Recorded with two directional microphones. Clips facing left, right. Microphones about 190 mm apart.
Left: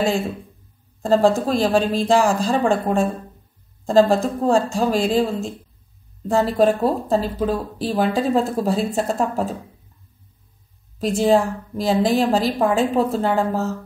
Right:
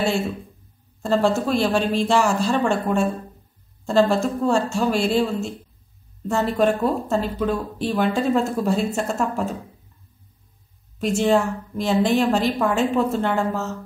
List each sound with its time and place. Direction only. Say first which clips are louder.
1.0 s speech: left 3 dB; 35° left (ahead or behind)
11.0 s speech: left 2 dB; 35° left (ahead or behind)